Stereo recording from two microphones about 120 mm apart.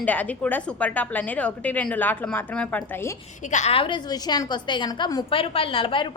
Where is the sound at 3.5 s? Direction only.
90° left.